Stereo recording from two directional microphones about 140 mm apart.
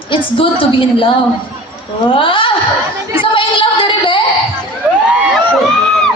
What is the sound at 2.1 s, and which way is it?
Speech, 40° left (ahead or behind).